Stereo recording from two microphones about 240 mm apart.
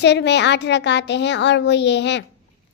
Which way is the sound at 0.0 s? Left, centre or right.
Left.